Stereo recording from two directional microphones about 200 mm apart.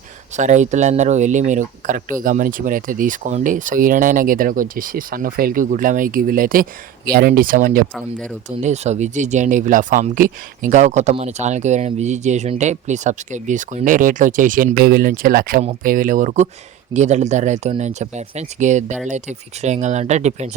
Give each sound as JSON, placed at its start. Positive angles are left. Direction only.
{"t": 0.3, "sound": "speech", "side_deg": -35}